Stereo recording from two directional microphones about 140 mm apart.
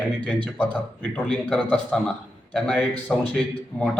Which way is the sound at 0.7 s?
10° left (ahead or behind).